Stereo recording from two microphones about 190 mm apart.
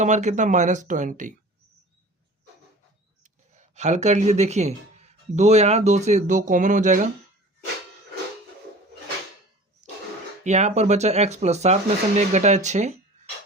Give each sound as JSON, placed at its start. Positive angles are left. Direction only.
{"t": 0.0, "sound": "speech", "side_deg": -40}
{"t": 3.5, "sound": "speech", "side_deg": -40}
{"t": 9.8, "sound": "throat clearing", "side_deg": -40}
{"t": 10.4, "sound": "speech", "side_deg": -35}